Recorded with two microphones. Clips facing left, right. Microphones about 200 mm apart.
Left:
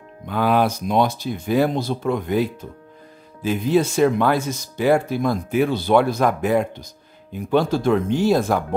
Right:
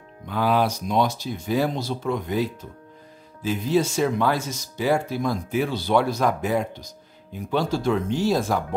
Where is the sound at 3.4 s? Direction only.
55° left (ahead or behind).